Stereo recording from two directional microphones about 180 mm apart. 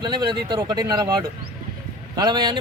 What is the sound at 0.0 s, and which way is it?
Speech, 25° right (ahead or behind).